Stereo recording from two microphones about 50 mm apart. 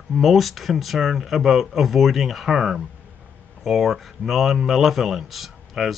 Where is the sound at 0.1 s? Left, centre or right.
Centre.